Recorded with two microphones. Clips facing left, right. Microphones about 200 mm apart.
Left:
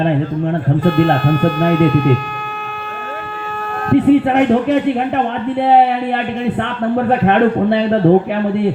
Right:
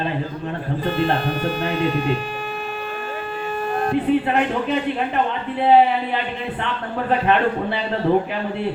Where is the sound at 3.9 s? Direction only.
60° left (ahead or behind).